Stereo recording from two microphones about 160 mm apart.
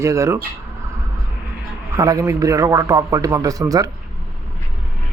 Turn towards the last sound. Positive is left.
turn(degrees=-20)  # may be behind; listen again after turning